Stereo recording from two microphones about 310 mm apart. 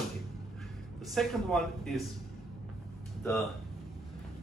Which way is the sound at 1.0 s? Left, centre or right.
Centre.